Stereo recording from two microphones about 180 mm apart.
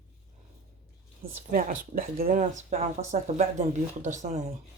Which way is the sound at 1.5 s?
50° right (ahead or behind).